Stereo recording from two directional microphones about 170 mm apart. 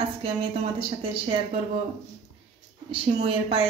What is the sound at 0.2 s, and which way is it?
A woman's voice, 35° right (ahead or behind).